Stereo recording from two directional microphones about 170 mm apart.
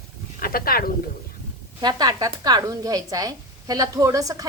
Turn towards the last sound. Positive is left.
turn(degrees=-20)  # may be behind; listen again after turning